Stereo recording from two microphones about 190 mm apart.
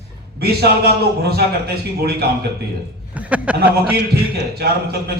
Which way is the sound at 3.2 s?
5° right (ahead or behind).